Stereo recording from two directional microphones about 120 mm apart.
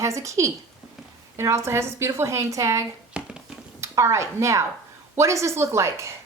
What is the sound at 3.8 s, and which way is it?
A woman's voice, 25° right (ahead or behind).